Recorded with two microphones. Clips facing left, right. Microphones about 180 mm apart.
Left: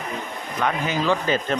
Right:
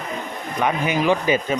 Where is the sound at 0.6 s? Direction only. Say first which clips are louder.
Right 3 dB; 15° right (ahead or behind).